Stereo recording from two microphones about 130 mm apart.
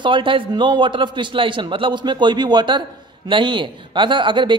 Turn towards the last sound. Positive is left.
turn(degrees=-40)  # may be behind; listen again after turning